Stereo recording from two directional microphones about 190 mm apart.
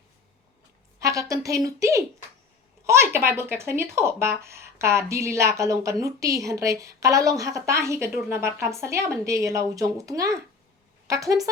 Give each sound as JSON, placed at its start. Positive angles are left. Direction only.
{"t": 0.9, "sound": "speech", "side_deg": -15}